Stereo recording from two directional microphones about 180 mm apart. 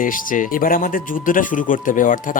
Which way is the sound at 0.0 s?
50° left (ahead or behind).